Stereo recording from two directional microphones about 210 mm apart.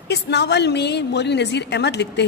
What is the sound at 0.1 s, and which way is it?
A woman's voice, 55° left (ahead or behind).